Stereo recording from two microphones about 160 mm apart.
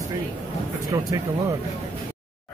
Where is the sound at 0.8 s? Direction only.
20° right (ahead or behind).